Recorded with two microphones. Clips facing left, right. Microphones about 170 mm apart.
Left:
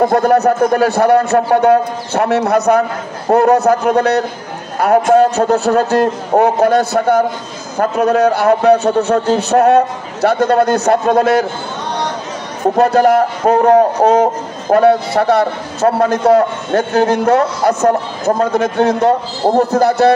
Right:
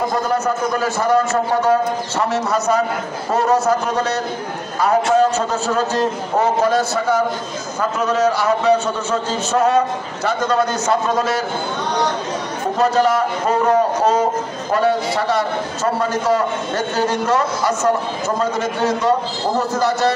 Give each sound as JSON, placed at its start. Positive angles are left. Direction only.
{"t": 0.0, "sound": "a man's voice", "side_deg": 60}
{"t": 12.7, "sound": "a man's voice", "side_deg": 60}